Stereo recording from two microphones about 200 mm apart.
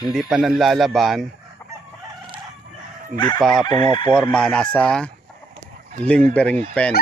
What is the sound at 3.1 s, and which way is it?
Chicken, 20° left (ahead or behind).